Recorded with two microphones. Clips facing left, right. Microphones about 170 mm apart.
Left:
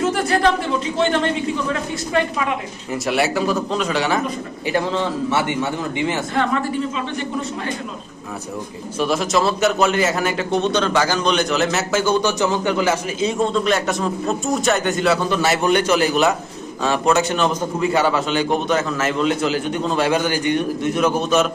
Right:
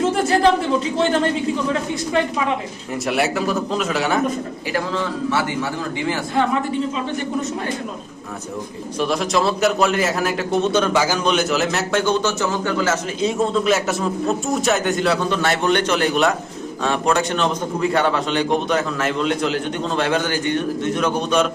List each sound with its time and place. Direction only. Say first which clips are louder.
0.0 s a sound: right 1 dB; 30° right (ahead or behind)
2.9 s a man's voice: left 1 dB; centre (ahead or behind)
4.7 s a man's voice: left 3 dB; 25° left (ahead or behind)
9.0 s a man's voice: left 1 dB; centre (ahead or behind)
13.1 s a man's voice: even; centre (ahead or behind)